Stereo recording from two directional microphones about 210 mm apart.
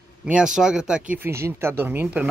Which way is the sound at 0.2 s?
5° right (ahead or behind).